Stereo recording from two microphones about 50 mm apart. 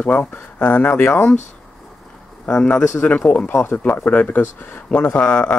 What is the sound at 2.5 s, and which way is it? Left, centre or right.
Speech, centre.